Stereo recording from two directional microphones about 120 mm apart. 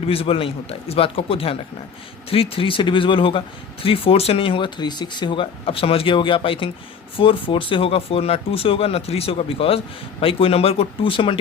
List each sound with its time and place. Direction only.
0.0 s speech: 55° left (ahead or behind)